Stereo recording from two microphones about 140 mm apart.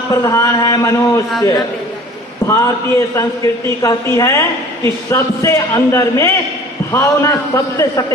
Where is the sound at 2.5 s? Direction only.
20° left (ahead or behind).